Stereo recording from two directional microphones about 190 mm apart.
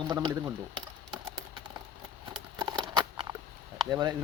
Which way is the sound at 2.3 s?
25° right (ahead or behind).